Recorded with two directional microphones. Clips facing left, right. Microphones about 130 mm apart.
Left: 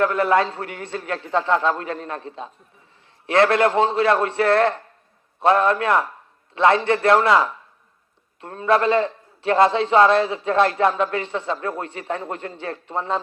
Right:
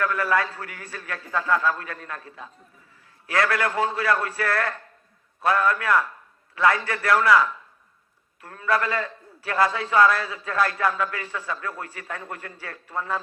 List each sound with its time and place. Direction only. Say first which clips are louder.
0.0 s a man's voice: left 6 dB; 25° left (ahead or behind)